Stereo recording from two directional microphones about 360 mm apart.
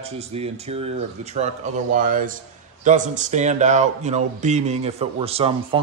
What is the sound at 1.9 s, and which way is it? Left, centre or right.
Speech, right.